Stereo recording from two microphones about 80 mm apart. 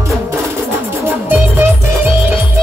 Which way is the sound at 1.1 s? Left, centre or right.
Right.